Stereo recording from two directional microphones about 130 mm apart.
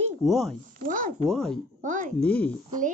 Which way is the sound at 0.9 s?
85° right.